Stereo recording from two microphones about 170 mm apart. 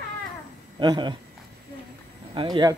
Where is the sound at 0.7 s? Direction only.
25° right (ahead or behind).